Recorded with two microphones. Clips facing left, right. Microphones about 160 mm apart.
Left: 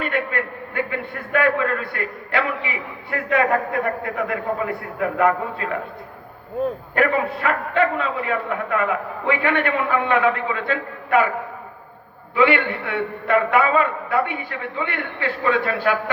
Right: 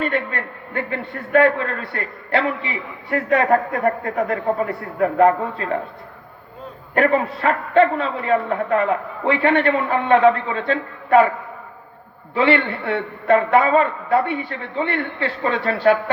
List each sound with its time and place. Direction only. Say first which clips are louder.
0.0 s a man's voice: right 1 dB; 30° right (ahead or behind)
6.9 s a man's voice: right 5 dB; 35° right (ahead or behind)
12.3 s a man's voice: even; 35° right (ahead or behind)